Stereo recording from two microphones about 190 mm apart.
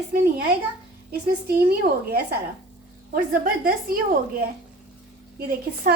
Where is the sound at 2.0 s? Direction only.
55° right (ahead or behind).